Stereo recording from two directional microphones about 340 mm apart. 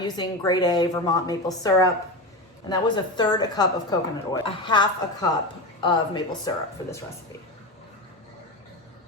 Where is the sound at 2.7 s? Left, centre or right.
Centre.